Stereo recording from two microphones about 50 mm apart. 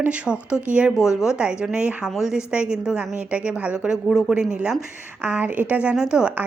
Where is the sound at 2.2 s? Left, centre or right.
Centre.